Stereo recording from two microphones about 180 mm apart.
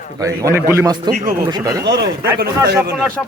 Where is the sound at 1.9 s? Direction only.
65° right (ahead or behind).